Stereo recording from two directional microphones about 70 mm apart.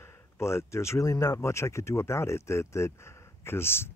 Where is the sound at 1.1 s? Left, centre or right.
Left.